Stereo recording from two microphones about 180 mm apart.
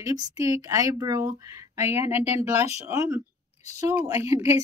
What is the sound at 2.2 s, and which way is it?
Speech, 35° left (ahead or behind).